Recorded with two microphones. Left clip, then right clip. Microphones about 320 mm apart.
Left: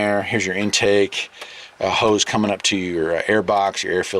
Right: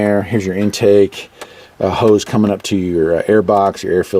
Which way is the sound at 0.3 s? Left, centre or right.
Centre.